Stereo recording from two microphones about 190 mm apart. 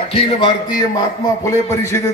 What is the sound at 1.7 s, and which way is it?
Speech, 15° left (ahead or behind).